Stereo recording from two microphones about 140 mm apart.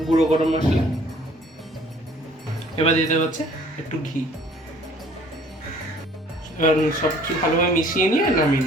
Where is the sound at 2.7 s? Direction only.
50° left (ahead or behind).